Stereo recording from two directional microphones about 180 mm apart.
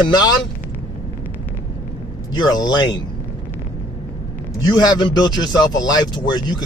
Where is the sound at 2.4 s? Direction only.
20° left (ahead or behind).